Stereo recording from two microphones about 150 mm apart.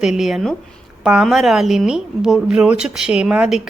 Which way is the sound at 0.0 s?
5° right (ahead or behind).